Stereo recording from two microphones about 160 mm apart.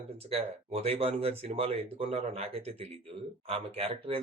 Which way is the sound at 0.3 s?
40° right (ahead or behind).